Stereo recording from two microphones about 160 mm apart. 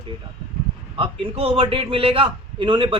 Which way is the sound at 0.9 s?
35° right (ahead or behind).